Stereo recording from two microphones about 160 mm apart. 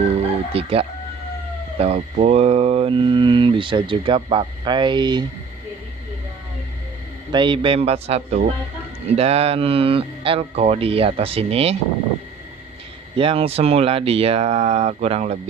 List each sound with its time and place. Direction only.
0.5 s mantra: 35° right (ahead or behind)
7.3 s mantra: 30° right (ahead or behind)
13.1 s mantra: 35° right (ahead or behind)